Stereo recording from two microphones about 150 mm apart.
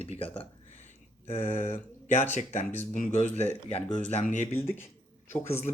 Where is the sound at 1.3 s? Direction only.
45° left (ahead or behind).